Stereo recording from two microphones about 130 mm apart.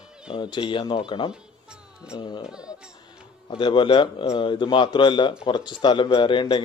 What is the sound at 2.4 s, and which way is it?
Speech, 5° right (ahead or behind).